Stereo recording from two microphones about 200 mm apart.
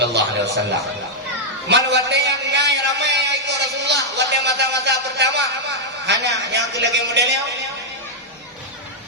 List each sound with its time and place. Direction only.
0.0 s a man's voice: 60° right (ahead or behind)
1.7 s a man's voice: 60° right (ahead or behind)